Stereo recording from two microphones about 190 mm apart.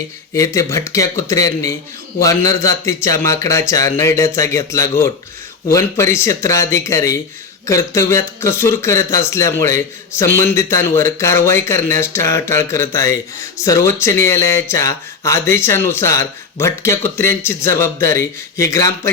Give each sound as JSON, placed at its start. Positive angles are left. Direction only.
{"t": 0.3, "sound": "speech", "side_deg": 15}